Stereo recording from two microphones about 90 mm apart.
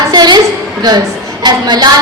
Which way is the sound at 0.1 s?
50° right (ahead or behind).